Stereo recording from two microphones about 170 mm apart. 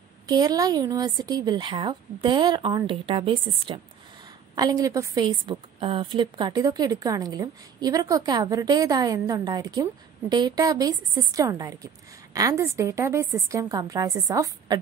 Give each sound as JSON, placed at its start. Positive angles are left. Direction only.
{"t": 0.3, "sound": "a woman's voice", "side_deg": -25}